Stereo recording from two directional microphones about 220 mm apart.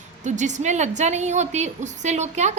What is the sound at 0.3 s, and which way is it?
A woman's voice, 35° right (ahead or behind).